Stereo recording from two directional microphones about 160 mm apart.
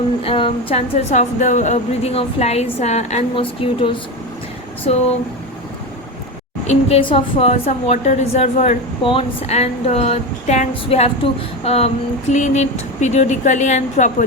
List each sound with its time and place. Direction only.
0.3 s a woman's voice: 35° left (ahead or behind)
6.7 s a woman's voice: 40° left (ahead or behind)